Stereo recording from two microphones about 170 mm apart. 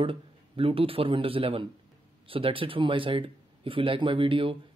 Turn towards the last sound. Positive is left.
turn(degrees=-30)  # may be behind; listen again after turning